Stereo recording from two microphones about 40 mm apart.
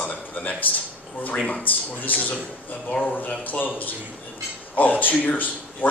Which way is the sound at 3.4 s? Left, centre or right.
Left.